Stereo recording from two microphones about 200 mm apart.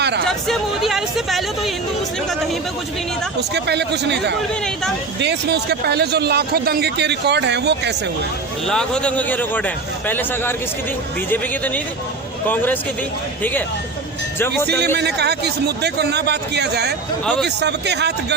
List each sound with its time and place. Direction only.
0.0 s a sound: 55° right (ahead or behind)
0.3 s a sound: centre (ahead or behind)
3.5 s speech: 55° right (ahead or behind)
8.6 s a man's voice: 5° left (ahead or behind)
14.3 s a man's voice: 10° left (ahead or behind)
14.9 s speech: 55° right (ahead or behind)